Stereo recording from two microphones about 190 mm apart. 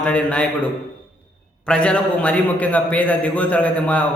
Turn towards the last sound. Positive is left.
turn(degrees=5)  # may be behind; listen again after turning